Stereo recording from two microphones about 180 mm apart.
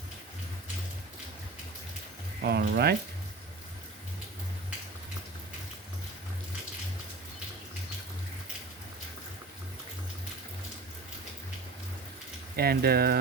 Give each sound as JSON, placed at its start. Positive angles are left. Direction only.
{"t": 2.4, "sound": "speech", "side_deg": -65}
{"t": 12.5, "sound": "speech", "side_deg": -60}